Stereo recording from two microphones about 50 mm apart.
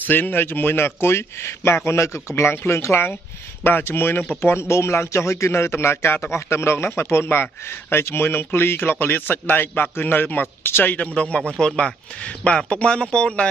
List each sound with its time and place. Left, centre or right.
0.0 s a man's voice: left
1.9 s a man's voice: left
2.5 s a man's voice: left
11.1 s a man's voice: left